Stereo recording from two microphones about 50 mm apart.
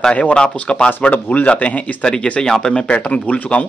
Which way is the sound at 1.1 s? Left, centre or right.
Left.